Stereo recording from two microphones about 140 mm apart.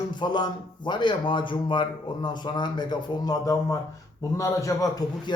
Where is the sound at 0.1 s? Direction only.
35° left (ahead or behind).